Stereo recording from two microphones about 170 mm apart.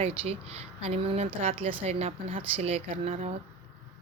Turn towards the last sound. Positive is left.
turn(degrees=-35)  # may be behind; listen again after turning